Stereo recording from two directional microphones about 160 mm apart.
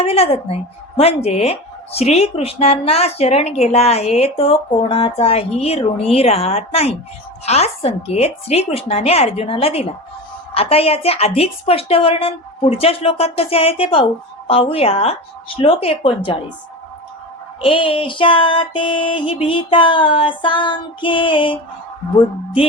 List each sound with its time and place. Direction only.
0.0 s speech: 40° left (ahead or behind)
17.6 s speech: 35° left (ahead or behind)